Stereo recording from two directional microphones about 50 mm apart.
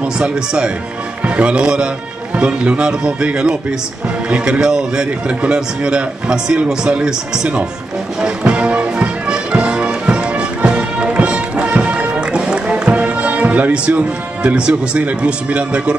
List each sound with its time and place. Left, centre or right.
1.2 s speech: right
8.2 s music: right